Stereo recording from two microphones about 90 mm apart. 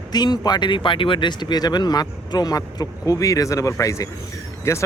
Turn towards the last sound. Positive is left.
turn(degrees=30)  # may be behind; listen again after turning